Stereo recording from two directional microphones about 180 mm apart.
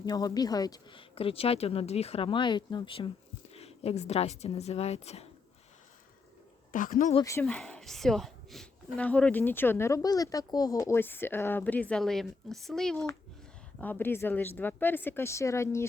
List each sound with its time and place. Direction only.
0.0 s a woman's voice: 20° left (ahead or behind)
6.7 s speech: 50° left (ahead or behind)
7.3 s speech: 10° left (ahead or behind)